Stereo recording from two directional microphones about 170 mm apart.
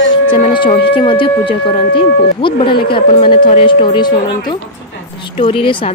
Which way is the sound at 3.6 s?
30° left (ahead or behind).